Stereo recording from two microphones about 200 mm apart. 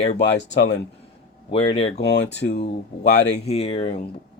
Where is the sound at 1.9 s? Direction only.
60° left (ahead or behind).